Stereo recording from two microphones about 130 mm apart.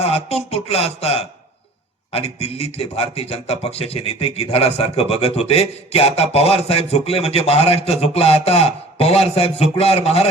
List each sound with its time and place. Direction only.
0.0 s speech: 50° left (ahead or behind)